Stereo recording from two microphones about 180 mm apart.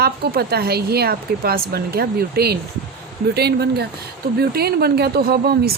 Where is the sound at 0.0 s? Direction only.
60° right (ahead or behind).